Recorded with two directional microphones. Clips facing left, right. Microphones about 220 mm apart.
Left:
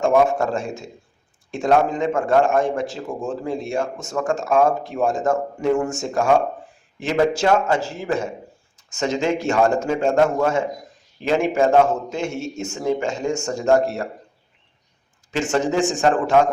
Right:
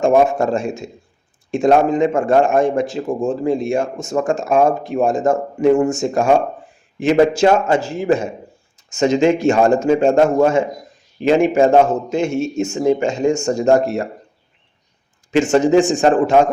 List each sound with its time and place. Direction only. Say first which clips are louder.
0.0 s a man's voice: right 3 dB; 20° right (ahead or behind)
15.5 s a man's voice: right 6 dB; 20° right (ahead or behind)